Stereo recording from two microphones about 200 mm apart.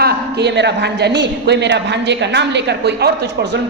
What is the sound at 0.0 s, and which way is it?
A woman's voice, 55° right (ahead or behind).